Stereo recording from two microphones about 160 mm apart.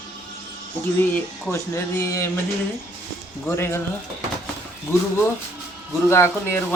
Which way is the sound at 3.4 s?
15° left (ahead or behind).